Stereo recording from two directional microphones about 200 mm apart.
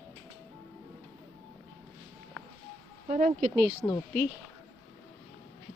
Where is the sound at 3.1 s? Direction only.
40° right (ahead or behind).